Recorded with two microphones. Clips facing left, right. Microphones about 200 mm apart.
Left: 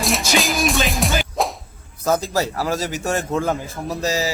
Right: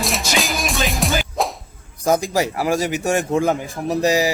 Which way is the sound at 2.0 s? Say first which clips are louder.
Right 2 dB; 15° right (ahead or behind).